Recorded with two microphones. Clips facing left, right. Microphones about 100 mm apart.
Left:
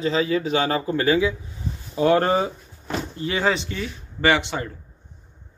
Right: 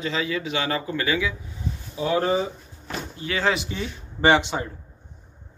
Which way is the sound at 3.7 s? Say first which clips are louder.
Left 1 dB; 20° right (ahead or behind).